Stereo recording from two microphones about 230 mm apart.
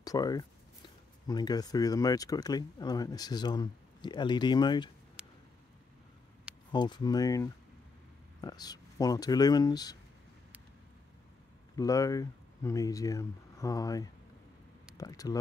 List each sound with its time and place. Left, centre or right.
0.0 s speech: centre
5.2 s a sound: centre
6.7 s speech: centre
11.7 s speech: centre